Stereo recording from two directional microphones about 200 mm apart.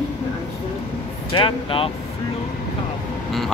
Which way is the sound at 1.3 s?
25° left (ahead or behind).